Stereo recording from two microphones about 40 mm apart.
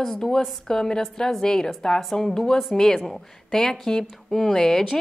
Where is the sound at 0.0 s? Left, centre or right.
Centre.